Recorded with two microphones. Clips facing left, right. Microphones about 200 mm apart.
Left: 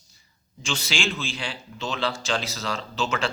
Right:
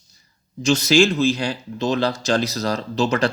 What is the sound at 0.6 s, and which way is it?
A man's voice, 40° right (ahead or behind).